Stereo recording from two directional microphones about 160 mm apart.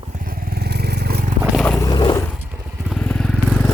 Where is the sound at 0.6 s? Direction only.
90° right.